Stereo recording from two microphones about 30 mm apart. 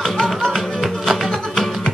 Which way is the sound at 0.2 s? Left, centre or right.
Centre.